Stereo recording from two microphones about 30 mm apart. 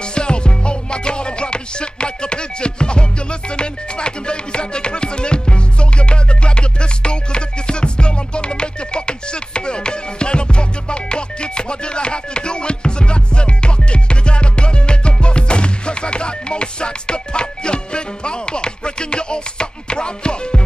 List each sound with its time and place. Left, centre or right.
0.1 s music: left